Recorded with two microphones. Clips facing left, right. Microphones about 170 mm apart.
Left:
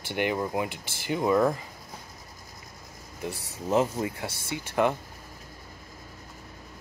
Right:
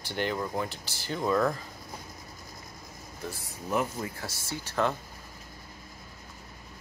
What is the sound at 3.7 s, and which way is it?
Speech, 20° left (ahead or behind).